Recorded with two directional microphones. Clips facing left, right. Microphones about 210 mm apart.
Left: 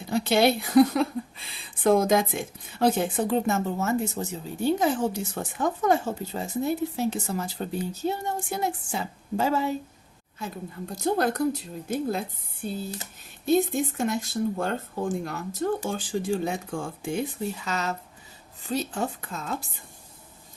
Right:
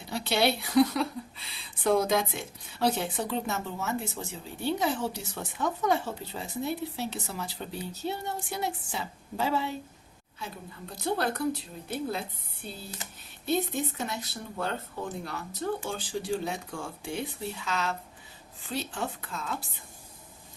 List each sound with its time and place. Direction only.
0.1 s speech: 50° left (ahead or behind)